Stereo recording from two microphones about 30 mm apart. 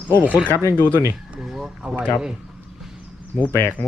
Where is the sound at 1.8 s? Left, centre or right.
Right.